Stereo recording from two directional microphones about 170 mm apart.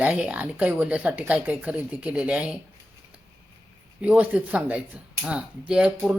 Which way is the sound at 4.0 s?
10° right (ahead or behind).